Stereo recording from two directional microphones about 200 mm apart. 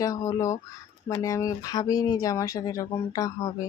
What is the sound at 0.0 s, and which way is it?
Speech, 15° left (ahead or behind).